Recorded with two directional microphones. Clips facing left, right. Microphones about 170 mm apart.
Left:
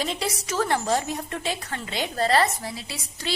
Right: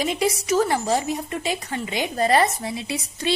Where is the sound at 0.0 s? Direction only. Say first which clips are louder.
Right 6 dB; 10° right (ahead or behind).